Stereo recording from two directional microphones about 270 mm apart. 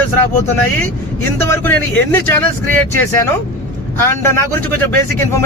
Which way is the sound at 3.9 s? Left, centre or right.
Centre.